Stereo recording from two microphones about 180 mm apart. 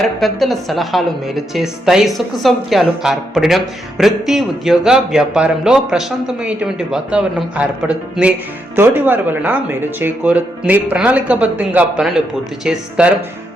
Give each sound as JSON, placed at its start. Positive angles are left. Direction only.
{"t": 0.2, "sound": "a woman's voice", "side_deg": 0}